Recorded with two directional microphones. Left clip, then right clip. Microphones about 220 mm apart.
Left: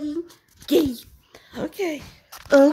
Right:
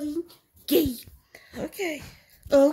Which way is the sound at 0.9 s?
20° left (ahead or behind).